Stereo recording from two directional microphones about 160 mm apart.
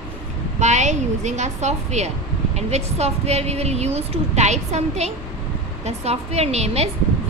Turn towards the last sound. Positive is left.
turn(degrees=-40)  # may be behind; listen again after turning